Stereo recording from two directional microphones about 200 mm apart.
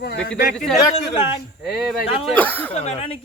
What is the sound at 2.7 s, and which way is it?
Speech, 30° left (ahead or behind).